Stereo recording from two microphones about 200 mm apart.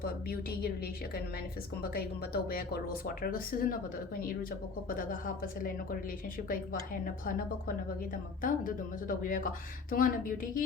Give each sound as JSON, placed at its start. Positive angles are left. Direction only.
{"t": 0.0, "sound": "speech", "side_deg": 50}
{"t": 1.8, "sound": "speech", "side_deg": 50}